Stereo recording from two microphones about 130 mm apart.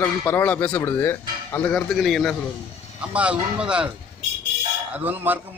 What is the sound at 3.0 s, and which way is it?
Speech, 10° right (ahead or behind).